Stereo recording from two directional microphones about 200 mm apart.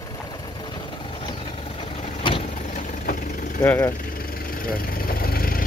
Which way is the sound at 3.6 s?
10° left (ahead or behind).